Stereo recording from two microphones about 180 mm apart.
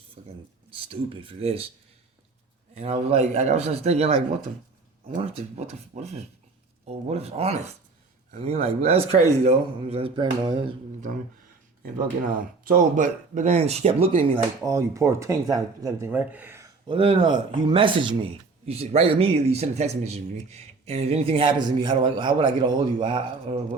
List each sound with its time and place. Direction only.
0.2 s speech: 50° right (ahead or behind)
0.7 s speech: 30° right (ahead or behind)
2.7 s speech: 35° right (ahead or behind)
12.2 s speech: 45° right (ahead or behind)
14.6 s speech: 15° right (ahead or behind)
16.8 s speech: 30° right (ahead or behind)